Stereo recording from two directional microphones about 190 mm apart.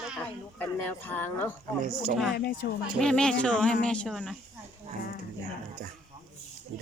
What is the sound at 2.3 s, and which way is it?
Speech, 55° left (ahead or behind).